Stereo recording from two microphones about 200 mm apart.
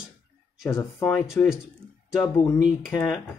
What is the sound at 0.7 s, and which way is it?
Speech, 15° left (ahead or behind).